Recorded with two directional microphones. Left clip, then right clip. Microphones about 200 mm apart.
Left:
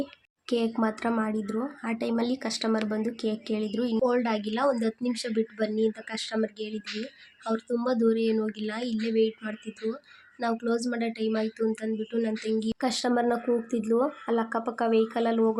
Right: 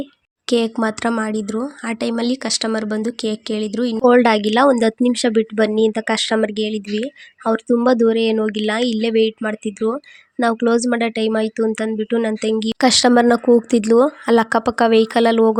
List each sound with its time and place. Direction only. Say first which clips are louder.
0.4 s speech: right 9 dB; 35° right (ahead or behind)
4.0 s speech: right 15 dB; 40° right (ahead or behind)